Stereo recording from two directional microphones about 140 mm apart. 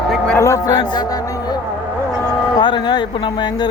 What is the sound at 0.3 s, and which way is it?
Speech, 20° left (ahead or behind).